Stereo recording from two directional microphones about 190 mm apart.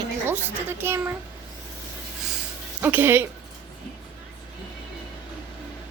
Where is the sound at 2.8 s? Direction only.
10° right (ahead or behind).